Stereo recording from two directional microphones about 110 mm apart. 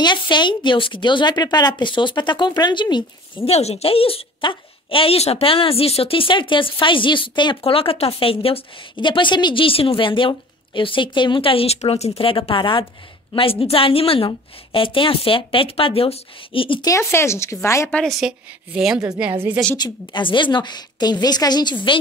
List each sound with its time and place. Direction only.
0.0 s a woman's voice: 45° left (ahead or behind)
3.4 s a woman's voice: 70° left (ahead or behind); by 16.8 s 50° left (ahead or behind)
16.8 s speech: 25° left (ahead or behind)
17.9 s a woman's voice: centre (ahead or behind)
19.8 s a woman's voice: 45° left (ahead or behind)